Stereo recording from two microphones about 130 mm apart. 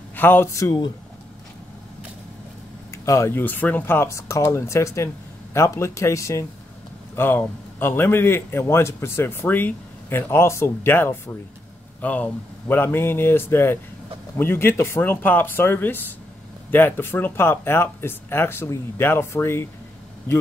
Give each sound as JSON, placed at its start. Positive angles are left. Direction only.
{"t": 0.1, "sound": "speech", "side_deg": 15}
{"t": 2.9, "sound": "a man's voice", "side_deg": 20}